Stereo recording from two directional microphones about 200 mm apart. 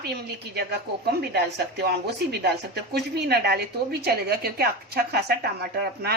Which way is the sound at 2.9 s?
55° right (ahead or behind).